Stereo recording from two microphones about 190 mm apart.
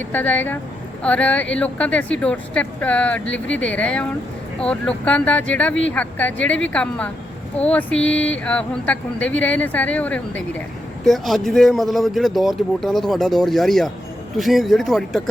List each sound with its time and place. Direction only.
0.1 s speech: 10° left (ahead or behind)